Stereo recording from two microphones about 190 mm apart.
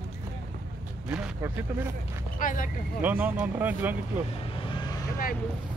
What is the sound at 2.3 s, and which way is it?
Speech, 45° left (ahead or behind).